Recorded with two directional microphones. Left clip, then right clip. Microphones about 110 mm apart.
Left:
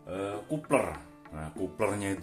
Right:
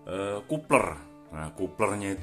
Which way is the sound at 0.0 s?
55° right (ahead or behind).